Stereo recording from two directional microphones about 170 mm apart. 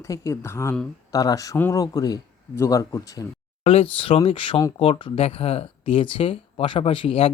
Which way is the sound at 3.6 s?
35° left (ahead or behind).